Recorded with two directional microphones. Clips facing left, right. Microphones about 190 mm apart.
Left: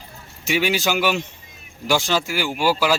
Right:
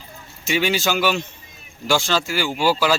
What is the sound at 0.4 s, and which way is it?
A man's voice, 10° left (ahead or behind).